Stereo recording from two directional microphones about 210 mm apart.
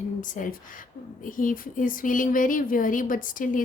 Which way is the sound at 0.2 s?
40° left (ahead or behind).